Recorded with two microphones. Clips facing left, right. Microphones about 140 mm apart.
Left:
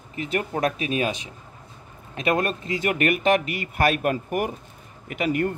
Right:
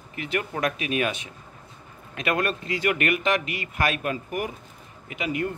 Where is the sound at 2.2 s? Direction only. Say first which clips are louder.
Left 2 dB; 30° left (ahead or behind); by 5.5 s 50° left (ahead or behind).